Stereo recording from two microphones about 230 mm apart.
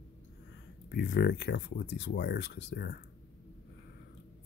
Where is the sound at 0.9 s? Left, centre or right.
Left.